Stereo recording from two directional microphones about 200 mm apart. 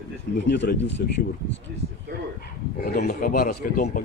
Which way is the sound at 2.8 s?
45° left (ahead or behind).